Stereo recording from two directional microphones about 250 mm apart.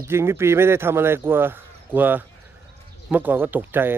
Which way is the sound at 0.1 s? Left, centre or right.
Centre.